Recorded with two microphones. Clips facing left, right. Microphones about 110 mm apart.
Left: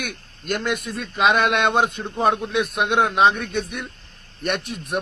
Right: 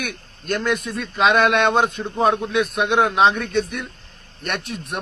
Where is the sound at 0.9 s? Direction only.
Centre (ahead or behind).